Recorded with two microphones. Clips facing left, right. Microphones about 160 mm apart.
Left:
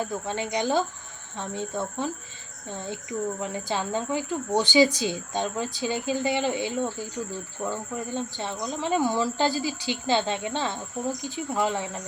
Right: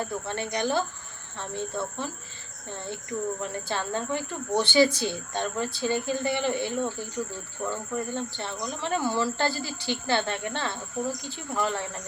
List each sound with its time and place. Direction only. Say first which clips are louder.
0.0 s speech: left 2 dB; 15° left (ahead or behind)